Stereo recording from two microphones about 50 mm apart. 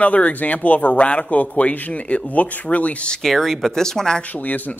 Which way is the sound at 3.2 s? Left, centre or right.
Centre.